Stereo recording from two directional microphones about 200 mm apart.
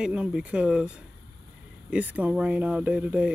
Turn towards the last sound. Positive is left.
turn(degrees=-5)  # may be behind; listen again after turning